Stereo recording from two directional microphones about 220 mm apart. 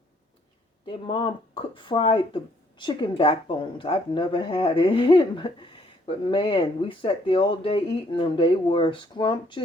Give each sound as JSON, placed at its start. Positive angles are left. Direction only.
{"t": 0.9, "sound": "a woman's voice", "side_deg": 25}